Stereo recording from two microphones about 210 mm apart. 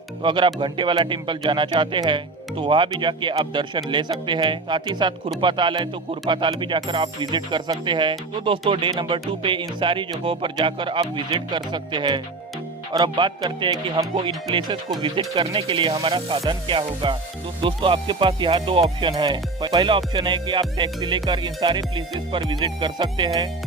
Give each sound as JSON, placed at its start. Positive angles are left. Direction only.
{"t": 0.2, "sound": "speech", "side_deg": -25}